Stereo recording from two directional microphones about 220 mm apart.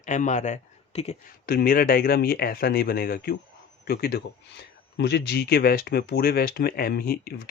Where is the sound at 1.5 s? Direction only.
45° left (ahead or behind).